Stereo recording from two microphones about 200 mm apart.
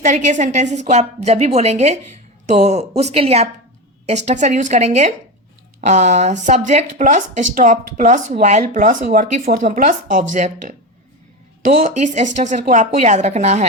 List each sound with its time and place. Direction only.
0.0 s speech: 40° right (ahead or behind)